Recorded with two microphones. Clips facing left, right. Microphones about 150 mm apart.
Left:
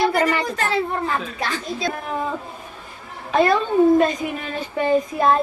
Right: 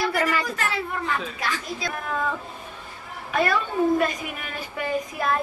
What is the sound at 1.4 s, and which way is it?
A woman's voice, 25° left (ahead or behind).